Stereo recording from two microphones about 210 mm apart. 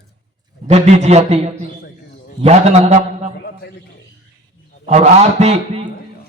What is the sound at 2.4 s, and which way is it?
Speech, 30° right (ahead or behind).